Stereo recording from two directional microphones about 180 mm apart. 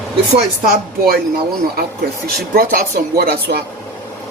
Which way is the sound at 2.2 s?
55° right (ahead or behind).